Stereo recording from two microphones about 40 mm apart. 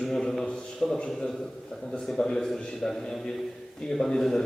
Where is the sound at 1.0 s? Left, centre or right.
Left.